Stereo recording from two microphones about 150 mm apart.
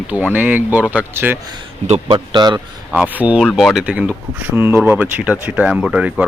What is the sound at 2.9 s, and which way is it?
Speech, 10° right (ahead or behind).